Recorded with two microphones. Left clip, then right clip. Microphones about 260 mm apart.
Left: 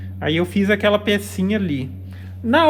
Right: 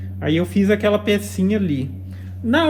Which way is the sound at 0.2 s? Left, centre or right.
Left.